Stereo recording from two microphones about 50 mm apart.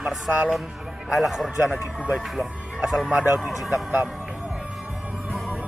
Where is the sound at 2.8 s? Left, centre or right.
Centre.